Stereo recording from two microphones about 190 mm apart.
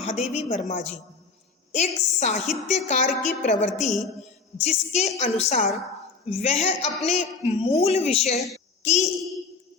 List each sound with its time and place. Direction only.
0.0 s a woman's voice: 35° left (ahead or behind)